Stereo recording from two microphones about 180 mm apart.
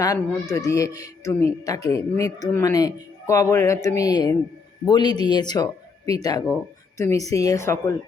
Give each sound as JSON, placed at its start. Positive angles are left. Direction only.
{"t": 0.0, "sound": "speech", "side_deg": 20}